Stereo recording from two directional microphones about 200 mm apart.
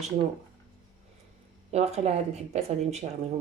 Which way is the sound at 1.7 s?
35° right (ahead or behind).